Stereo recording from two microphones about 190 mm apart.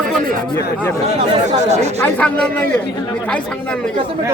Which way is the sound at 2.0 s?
10° left (ahead or behind).